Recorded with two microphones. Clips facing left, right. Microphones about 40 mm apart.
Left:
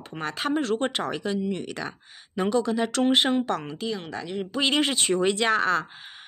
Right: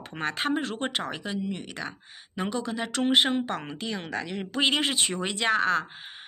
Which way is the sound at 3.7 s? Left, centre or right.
Right.